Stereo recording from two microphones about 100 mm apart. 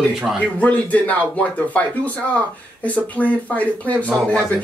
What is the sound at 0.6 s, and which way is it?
Speech, 15° left (ahead or behind).